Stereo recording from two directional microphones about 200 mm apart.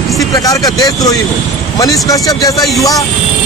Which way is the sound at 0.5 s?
20° left (ahead or behind).